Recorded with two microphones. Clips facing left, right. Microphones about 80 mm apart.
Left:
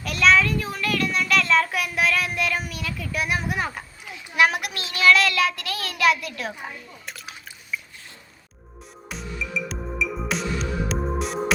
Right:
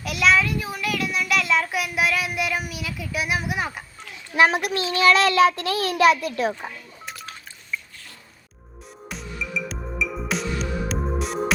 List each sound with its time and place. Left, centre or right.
0.0 s a child's voice: centre
4.4 s child singing: right
7.0 s a sound: centre
9.0 s music: centre